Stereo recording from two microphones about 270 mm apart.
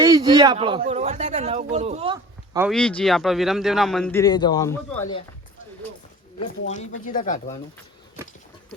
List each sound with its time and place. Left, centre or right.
0.0 s speech: centre
2.6 s a man's voice: centre
6.4 s speech: left